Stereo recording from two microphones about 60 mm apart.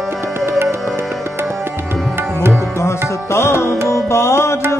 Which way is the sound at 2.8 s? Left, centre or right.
Left.